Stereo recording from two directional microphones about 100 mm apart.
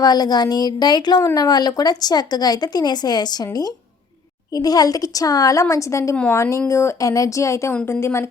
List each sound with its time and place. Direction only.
0.0 s a woman's voice: 40° left (ahead or behind); by 8.3 s 25° left (ahead or behind)